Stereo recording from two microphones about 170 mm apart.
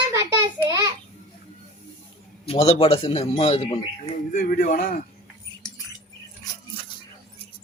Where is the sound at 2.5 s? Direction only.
35° left (ahead or behind).